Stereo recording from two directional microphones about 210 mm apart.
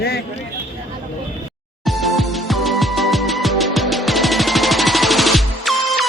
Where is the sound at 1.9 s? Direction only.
Centre (ahead or behind).